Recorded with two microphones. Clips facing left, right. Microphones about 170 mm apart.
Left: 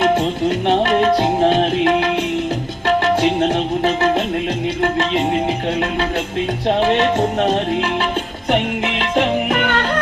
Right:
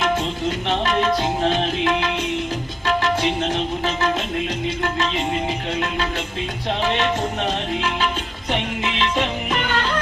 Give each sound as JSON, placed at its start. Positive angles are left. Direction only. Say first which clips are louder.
{"t": 0.7, "sound": "music", "louder": "left 5 dB", "side_deg": 55}
{"t": 2.8, "sound": "tabla", "louder": "left 5 dB", "side_deg": 60}
{"t": 6.7, "sound": "music", "louder": "left 6 dB", "side_deg": 60}
{"t": 8.4, "sound": "music", "louder": "left 6 dB", "side_deg": 55}